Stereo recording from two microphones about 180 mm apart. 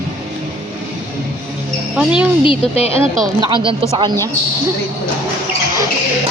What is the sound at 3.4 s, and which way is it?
Speech, 25° right (ahead or behind).